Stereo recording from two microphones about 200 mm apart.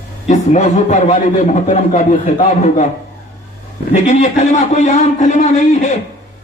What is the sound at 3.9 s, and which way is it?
A man's voice, 35° left (ahead or behind).